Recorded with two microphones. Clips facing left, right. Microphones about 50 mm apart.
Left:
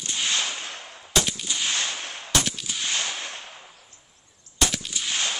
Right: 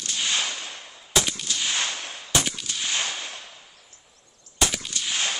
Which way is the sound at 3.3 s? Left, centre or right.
Left.